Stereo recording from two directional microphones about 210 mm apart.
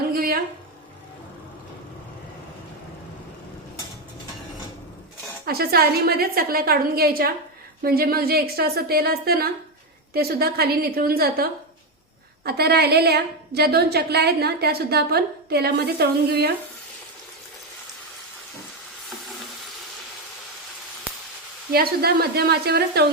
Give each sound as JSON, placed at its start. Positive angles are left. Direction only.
{"t": 0.1, "sound": "a sound", "side_deg": -45}
{"t": 5.5, "sound": "a woman's voice", "side_deg": -45}
{"t": 12.5, "sound": "a woman's voice", "side_deg": -50}
{"t": 21.7, "sound": "a woman's voice", "side_deg": -45}